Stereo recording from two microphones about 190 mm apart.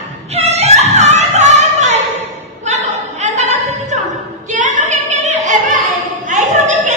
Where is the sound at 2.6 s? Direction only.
35° right (ahead or behind).